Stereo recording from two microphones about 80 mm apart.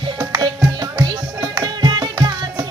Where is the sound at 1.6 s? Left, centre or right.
Right.